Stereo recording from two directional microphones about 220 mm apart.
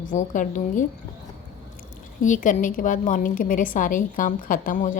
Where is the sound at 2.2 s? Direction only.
35° left (ahead or behind).